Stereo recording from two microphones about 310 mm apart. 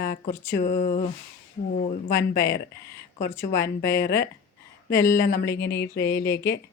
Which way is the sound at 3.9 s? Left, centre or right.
Left.